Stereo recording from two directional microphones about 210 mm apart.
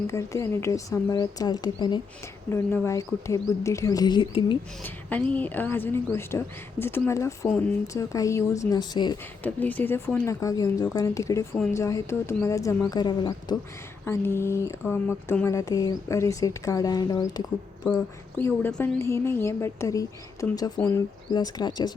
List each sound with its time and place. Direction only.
0.1 s a woman's voice: 15° left (ahead or behind)
4.8 s a woman's voice: 5° left (ahead or behind)
9.4 s a woman's voice: 10° left (ahead or behind)